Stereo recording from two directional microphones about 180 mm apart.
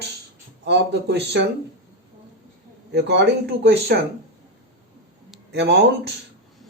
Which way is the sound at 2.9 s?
70° right (ahead or behind).